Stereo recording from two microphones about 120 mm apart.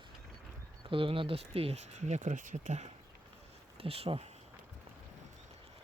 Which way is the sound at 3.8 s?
55° right (ahead or behind).